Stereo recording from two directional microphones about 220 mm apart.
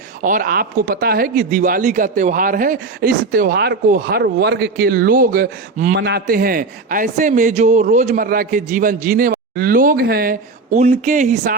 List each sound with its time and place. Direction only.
0.2 s speech: 40° right (ahead or behind)